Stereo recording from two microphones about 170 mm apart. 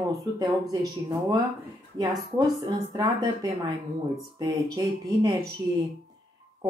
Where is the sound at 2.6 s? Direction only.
25° right (ahead or behind).